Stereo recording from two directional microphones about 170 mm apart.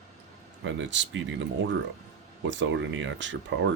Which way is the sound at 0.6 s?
90° right.